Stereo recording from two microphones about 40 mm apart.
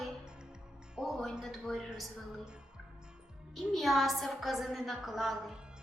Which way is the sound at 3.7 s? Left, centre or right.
Centre.